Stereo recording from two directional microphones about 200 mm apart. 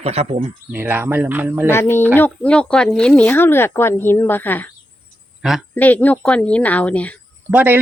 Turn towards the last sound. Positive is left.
turn(degrees=-10)  # may be behind; listen again after turning